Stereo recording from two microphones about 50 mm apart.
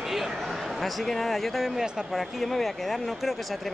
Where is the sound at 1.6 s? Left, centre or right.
Centre.